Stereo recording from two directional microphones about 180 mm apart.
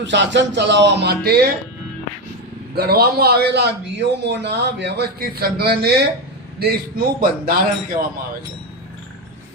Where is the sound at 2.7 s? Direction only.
60° right (ahead or behind).